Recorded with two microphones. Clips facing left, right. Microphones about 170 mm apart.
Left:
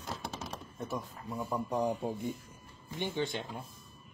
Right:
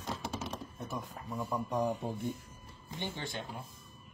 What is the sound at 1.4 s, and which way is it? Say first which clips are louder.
Speech: left 1 dB; 10° left (ahead or behind).